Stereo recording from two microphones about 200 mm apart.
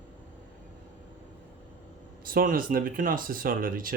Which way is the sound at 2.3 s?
45° right (ahead or behind).